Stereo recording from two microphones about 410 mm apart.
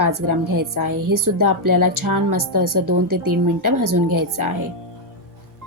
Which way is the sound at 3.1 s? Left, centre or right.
Right.